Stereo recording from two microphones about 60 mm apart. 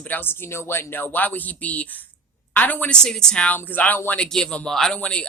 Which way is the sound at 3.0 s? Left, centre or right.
Centre.